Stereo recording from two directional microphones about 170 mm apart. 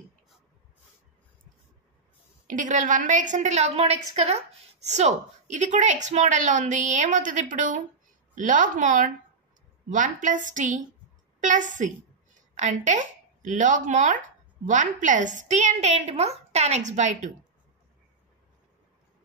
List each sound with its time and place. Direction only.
2.4 s a woman's voice: 50° right (ahead or behind)